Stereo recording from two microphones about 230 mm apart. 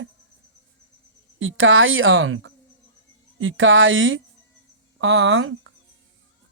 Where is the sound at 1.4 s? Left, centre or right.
Right.